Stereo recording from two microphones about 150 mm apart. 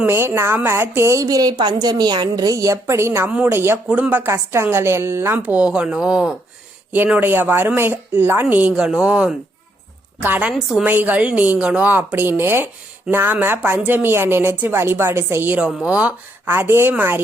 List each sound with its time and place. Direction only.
0.0 s a woman's voice: 15° right (ahead or behind)